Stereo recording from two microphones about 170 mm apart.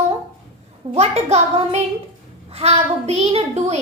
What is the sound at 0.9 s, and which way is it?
Speech, 40° right (ahead or behind).